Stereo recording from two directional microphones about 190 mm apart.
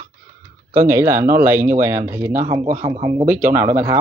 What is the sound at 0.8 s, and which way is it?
Speech, 15° right (ahead or behind).